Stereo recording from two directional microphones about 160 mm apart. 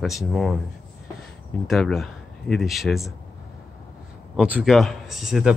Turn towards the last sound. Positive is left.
turn(degrees=0)  # may be behind; listen again after turning